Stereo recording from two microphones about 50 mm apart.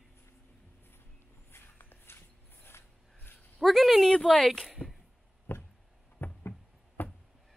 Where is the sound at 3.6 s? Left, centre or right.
Centre.